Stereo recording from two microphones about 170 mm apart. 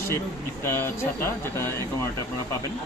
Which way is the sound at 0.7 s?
15° left (ahead or behind).